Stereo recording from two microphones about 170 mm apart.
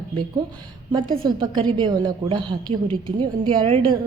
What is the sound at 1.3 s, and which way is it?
A woman's voice, 30° right (ahead or behind).